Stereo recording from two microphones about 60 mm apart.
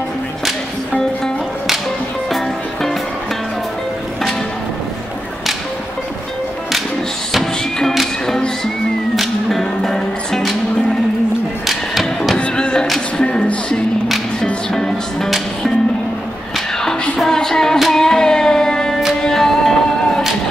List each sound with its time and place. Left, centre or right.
7.8 s music: centre
11.6 s music: centre
12.4 s a sound: centre
13.2 s music: centre
15.2 s music: centre
17.2 s music: centre